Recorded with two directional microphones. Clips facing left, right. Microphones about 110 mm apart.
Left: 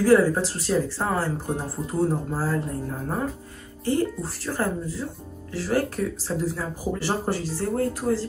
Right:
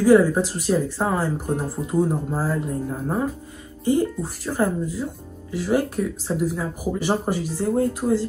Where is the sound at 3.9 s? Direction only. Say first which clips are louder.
Right 3 dB; 15° right (ahead or behind).